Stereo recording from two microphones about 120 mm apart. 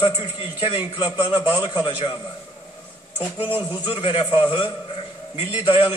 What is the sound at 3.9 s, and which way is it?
A man's voice, 45° left (ahead or behind).